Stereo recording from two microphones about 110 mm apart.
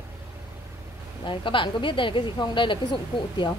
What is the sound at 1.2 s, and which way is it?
A woman's voice, 50° left (ahead or behind).